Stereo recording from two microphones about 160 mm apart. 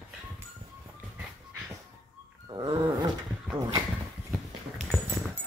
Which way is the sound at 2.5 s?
25° right (ahead or behind).